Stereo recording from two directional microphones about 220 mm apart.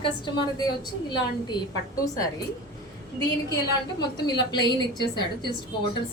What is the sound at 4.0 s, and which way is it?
A woman's voice, 20° left (ahead or behind).